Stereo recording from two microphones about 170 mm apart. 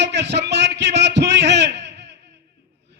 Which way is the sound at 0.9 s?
90° right.